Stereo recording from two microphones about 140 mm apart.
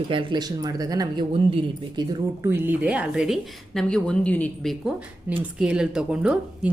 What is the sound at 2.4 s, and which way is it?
A woman's voice, 15° right (ahead or behind).